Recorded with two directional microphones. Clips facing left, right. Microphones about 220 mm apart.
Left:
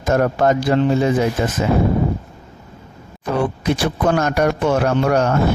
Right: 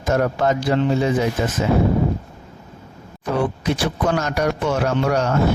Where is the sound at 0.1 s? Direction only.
50° left (ahead or behind).